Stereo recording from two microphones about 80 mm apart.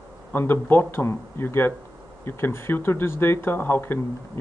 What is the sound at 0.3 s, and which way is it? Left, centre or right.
Speech, left.